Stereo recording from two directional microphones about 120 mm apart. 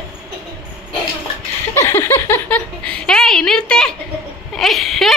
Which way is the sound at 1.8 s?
20° left (ahead or behind).